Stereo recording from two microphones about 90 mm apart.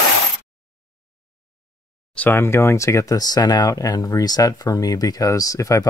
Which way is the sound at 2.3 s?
30° left (ahead or behind).